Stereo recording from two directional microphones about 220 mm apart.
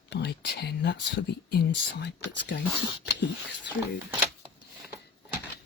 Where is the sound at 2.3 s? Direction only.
50° left (ahead or behind).